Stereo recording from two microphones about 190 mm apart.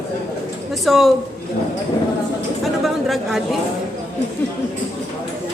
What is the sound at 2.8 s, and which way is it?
Speech, centre (ahead or behind).